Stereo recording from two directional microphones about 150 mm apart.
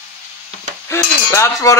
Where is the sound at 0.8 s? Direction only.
20° left (ahead or behind).